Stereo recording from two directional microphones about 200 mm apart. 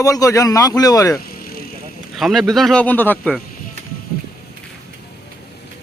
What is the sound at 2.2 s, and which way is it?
Speech, centre (ahead or behind).